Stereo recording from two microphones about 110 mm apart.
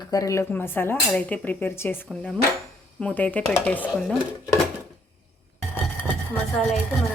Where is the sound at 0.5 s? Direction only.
20° left (ahead or behind).